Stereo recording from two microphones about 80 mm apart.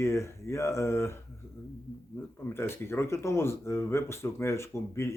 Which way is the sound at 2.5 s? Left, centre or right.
Left.